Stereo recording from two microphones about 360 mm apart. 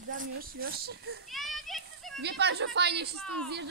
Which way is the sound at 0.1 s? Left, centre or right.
Right.